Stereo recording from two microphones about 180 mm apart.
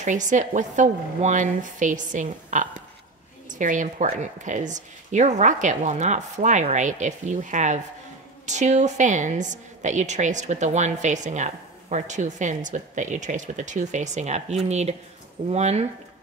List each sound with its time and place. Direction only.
0.0 s a woman's voice: 45° right (ahead or behind)